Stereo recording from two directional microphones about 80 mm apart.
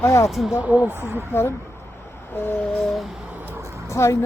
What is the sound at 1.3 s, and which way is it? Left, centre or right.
Speech, left.